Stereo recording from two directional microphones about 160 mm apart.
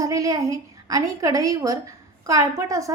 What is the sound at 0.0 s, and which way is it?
A woman's voice, 20° right (ahead or behind).